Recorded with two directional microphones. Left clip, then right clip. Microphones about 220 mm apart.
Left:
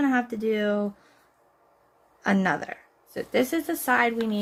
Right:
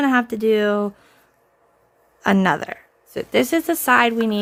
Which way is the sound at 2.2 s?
35° right (ahead or behind).